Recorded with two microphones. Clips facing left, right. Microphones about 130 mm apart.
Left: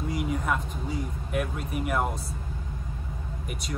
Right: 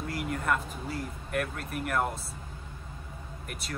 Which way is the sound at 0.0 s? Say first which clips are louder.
Left 3 dB; centre (ahead or behind).